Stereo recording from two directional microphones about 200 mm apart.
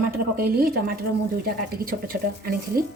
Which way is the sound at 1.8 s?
45° right (ahead or behind).